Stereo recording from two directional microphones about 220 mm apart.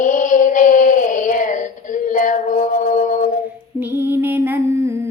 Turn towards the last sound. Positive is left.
turn(degrees=-10)  # may be behind; listen again after turning